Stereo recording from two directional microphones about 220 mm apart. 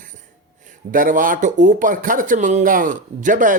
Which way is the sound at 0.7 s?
35° right (ahead or behind).